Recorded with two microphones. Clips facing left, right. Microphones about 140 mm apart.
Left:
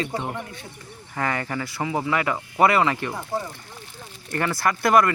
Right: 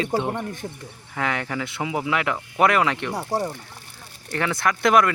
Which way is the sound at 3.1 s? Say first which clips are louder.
Right 4 dB; 35° right (ahead or behind).